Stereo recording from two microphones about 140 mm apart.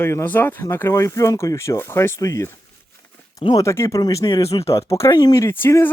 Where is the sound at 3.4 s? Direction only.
30° left (ahead or behind).